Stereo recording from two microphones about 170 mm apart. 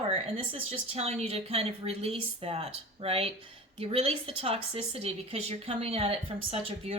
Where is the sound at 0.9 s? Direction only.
35° right (ahead or behind).